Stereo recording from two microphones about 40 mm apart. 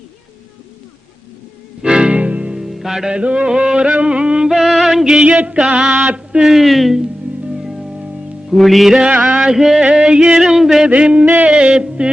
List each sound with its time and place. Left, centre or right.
1.8 s music: right
2.6 s music: centre
3.1 s yodeling: right
4.4 s music: centre
5.1 s music: right
5.8 s mantra: right
6.4 s speech: centre
7.0 s music: centre
9.4 s a sound: centre
9.9 s yodeling: centre
10.4 s a sound: centre
10.8 s yodeling: right
11.4 s a sound: right